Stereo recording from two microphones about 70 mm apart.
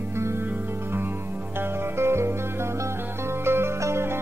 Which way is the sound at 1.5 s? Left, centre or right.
Right.